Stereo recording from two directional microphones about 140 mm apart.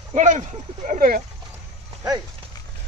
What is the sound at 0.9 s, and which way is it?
Speech, 75° right (ahead or behind).